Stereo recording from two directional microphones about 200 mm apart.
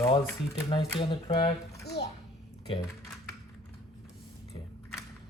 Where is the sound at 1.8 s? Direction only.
55° left (ahead or behind).